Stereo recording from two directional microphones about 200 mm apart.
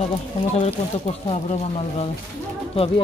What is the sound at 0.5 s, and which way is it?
Speech, 35° left (ahead or behind).